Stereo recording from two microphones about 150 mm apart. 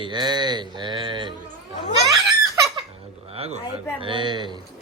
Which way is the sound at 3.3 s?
40° right (ahead or behind).